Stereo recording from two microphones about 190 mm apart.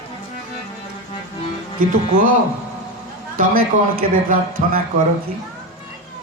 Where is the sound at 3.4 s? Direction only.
45° right (ahead or behind).